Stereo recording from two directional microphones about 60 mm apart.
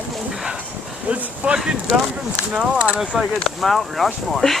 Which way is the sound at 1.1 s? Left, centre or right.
Right.